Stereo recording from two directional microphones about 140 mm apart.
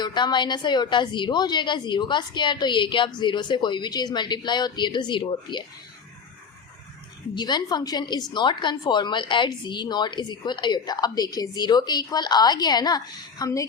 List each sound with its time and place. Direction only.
0.0 s a woman's voice: 30° left (ahead or behind)
7.3 s a woman's voice: 30° left (ahead or behind)